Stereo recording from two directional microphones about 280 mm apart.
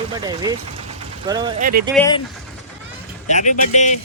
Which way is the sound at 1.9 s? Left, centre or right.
Centre.